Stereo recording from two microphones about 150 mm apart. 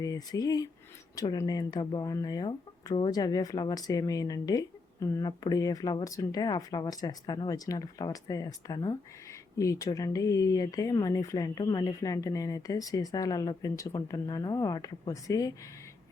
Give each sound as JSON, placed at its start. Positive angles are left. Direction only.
{"t": 0.0, "sound": "speech", "side_deg": 25}